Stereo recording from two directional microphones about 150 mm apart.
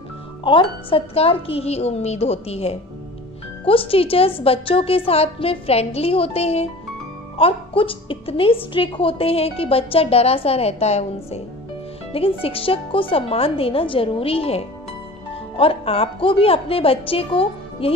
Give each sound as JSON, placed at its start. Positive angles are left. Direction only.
{"t": 0.4, "sound": "a woman's voice", "side_deg": 35}